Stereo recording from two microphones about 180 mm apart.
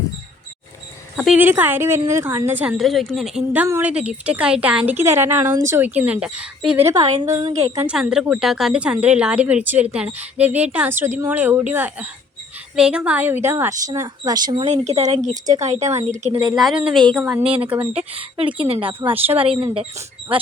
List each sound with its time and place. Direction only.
1.1 s speech: centre (ahead or behind)
1.4 s speech: 10° right (ahead or behind)
2.7 s a woman's voice: centre (ahead or behind); by 16.0 s 40° right (ahead or behind)
16.3 s a woman's voice: 25° right (ahead or behind)
16.6 s a woman's voice: 5° right (ahead or behind)
17.4 s a woman's voice: 30° right (ahead or behind)